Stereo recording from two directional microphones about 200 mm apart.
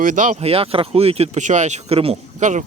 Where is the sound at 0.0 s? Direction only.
40° right (ahead or behind).